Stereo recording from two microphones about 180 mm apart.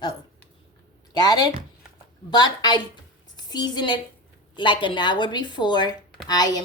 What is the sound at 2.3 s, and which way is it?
A woman's voice, 25° left (ahead or behind).